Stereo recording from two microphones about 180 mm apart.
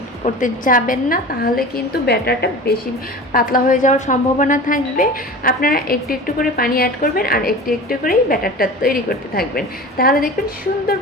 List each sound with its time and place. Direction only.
0.3 s a woman's voice: 50° left (ahead or behind); by 2.7 s 65° left (ahead or behind)
3.3 s a woman's voice: 50° left (ahead or behind)